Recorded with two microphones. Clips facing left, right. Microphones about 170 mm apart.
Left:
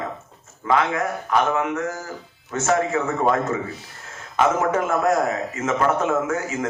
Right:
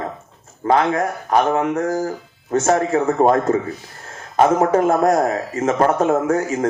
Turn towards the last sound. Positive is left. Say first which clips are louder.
# right 6 dB
turn(degrees=-35)  # may be behind; listen again after turning